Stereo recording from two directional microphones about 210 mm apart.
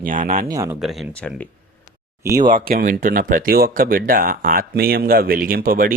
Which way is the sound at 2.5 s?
40° right (ahead or behind).